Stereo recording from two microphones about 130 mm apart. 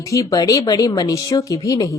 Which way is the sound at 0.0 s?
25° left (ahead or behind).